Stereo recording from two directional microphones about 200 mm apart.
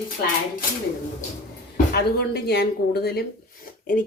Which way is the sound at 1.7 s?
50° left (ahead or behind).